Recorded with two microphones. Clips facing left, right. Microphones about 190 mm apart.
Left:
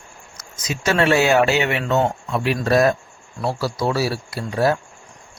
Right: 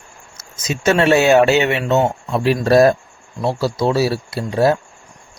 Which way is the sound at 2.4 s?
35° right (ahead or behind).